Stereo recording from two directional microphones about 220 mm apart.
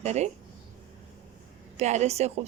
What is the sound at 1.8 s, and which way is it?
Speech, 30° right (ahead or behind).